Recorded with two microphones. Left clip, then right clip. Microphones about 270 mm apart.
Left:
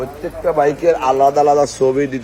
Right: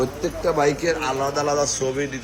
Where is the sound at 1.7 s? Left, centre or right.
Centre.